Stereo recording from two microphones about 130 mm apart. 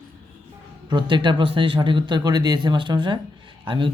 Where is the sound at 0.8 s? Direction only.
35° right (ahead or behind).